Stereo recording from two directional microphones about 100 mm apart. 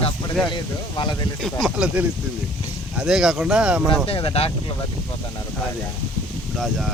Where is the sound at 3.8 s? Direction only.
65° left (ahead or behind).